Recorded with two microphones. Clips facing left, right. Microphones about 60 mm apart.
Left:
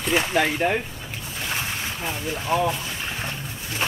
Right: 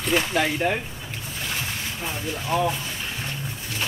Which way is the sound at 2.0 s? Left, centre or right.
Centre.